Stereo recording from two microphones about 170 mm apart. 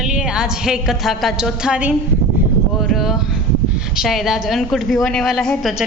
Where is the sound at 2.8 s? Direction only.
Centre (ahead or behind).